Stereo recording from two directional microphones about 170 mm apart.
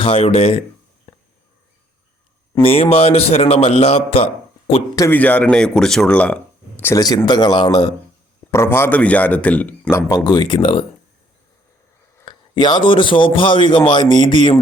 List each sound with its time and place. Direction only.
0.0 s a man's voice: 35° left (ahead or behind)
2.6 s a man's voice: 35° left (ahead or behind)
4.9 s speech: 15° left (ahead or behind)
6.9 s a man's voice: 20° left (ahead or behind)
10.2 s a man's voice: 25° left (ahead or behind)
12.2 s a man's voice: 25° left (ahead or behind)